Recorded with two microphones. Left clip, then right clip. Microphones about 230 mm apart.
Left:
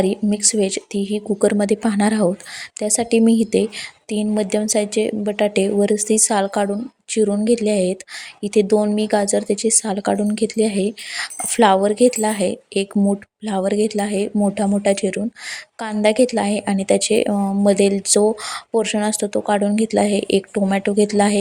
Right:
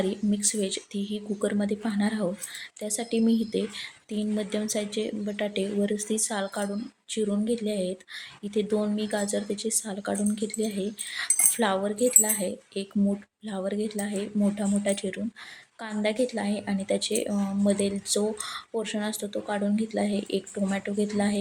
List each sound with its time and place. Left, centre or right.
0.0 s a woman's voice: left